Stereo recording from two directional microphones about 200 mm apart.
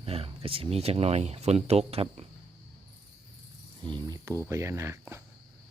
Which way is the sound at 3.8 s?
20° right (ahead or behind).